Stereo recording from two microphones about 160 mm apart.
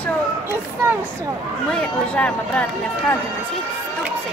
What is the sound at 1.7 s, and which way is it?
Speech, 5° left (ahead or behind).